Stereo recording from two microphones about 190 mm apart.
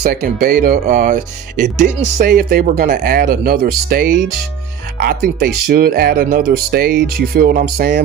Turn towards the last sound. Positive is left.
turn(degrees=-55)  # may be behind; listen again after turning